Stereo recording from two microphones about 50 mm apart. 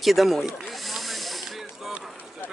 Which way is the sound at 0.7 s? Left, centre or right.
Centre.